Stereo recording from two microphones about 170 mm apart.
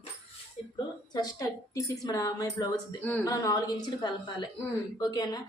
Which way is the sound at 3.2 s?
20° left (ahead or behind).